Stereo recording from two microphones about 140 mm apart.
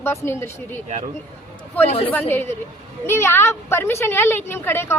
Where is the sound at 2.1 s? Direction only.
15° left (ahead or behind).